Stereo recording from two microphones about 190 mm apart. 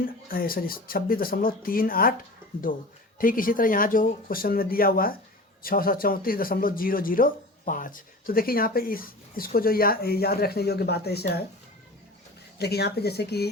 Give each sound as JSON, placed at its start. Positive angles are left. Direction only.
{"t": 0.0, "sound": "speech", "side_deg": 50}
{"t": 3.2, "sound": "speech", "side_deg": 45}
{"t": 12.5, "sound": "speech", "side_deg": 60}